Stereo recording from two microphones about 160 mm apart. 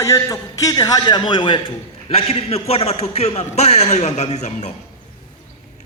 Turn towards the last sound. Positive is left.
turn(degrees=45)  # may be behind; listen again after turning